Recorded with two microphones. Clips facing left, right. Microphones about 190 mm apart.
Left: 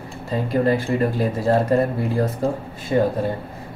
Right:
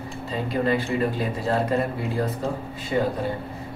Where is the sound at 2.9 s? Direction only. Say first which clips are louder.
Left 5 dB; 45° left (ahead or behind).